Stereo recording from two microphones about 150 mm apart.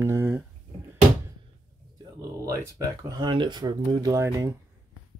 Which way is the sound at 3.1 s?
30° right (ahead or behind).